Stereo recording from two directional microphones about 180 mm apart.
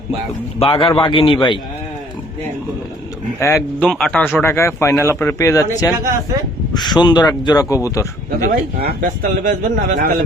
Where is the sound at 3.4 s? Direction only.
15° left (ahead or behind).